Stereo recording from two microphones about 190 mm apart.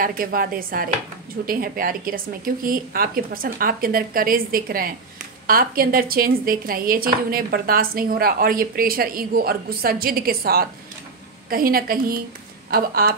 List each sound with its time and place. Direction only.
0.0 s speech: 50° right (ahead or behind)